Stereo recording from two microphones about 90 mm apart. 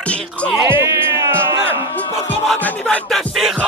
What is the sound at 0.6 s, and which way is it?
Speech, 30° right (ahead or behind).